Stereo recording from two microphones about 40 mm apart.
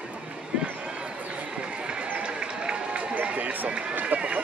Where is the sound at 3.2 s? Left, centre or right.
Right.